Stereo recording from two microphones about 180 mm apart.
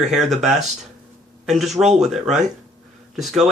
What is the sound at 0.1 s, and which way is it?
Speech, centre (ahead or behind).